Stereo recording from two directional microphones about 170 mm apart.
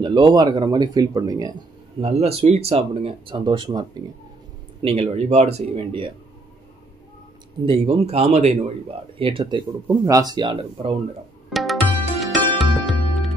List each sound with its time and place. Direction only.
0.0 s speech: 30° right (ahead or behind)
2.0 s speech: 35° right (ahead or behind)
4.8 s speech: 35° right (ahead or behind)
7.6 s speech: 35° right (ahead or behind)
11.5 s music: centre (ahead or behind)